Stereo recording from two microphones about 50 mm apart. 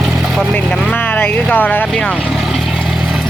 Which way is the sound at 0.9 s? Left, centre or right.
Left.